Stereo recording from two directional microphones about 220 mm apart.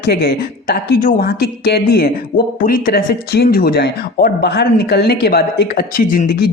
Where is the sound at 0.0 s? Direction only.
45° left (ahead or behind).